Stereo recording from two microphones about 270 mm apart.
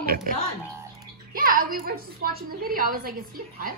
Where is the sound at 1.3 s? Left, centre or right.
Right.